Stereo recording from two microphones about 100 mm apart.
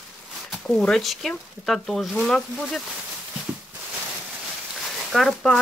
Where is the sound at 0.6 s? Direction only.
10° left (ahead or behind).